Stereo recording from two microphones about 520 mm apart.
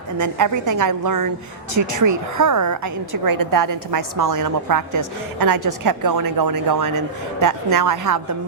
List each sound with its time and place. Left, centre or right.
0.2 s a woman's voice: right